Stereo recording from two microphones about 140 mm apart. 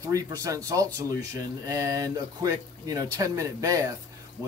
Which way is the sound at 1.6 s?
25° right (ahead or behind).